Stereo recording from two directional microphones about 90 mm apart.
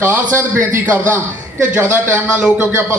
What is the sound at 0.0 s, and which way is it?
A man's voice, 25° right (ahead or behind).